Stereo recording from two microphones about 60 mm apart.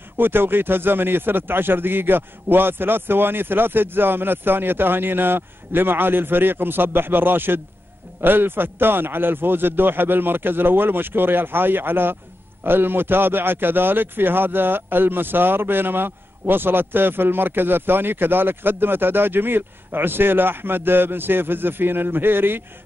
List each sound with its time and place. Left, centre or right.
0.2 s a man's voice: right